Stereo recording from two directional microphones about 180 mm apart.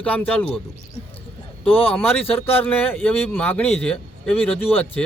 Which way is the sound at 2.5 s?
10° left (ahead or behind).